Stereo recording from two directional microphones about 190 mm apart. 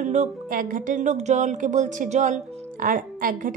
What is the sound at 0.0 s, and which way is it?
Speech, 40° right (ahead or behind).